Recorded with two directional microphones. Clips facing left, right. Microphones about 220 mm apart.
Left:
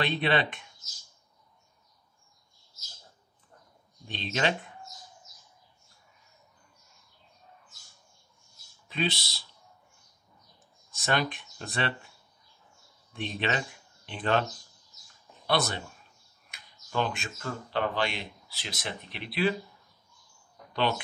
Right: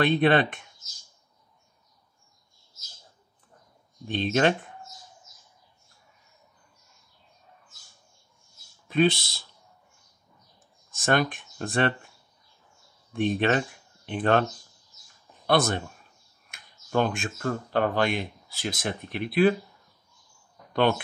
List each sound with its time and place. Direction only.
0.0 s speech: 50° right (ahead or behind)
4.1 s speech: 50° right (ahead or behind)
8.8 s speech: 50° right (ahead or behind)
10.9 s speech: 50° right (ahead or behind)
13.1 s speech: 50° right (ahead or behind)
15.4 s speech: 50° right (ahead or behind)